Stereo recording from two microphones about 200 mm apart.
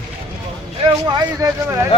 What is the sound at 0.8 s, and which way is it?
Speech, 20° right (ahead or behind).